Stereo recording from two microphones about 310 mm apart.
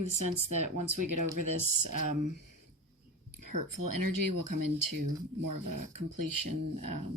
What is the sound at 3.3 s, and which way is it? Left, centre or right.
Speech, right.